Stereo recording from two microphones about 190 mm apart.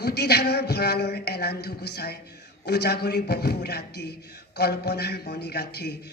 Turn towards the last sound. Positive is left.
turn(degrees=60)  # may be behind; listen again after turning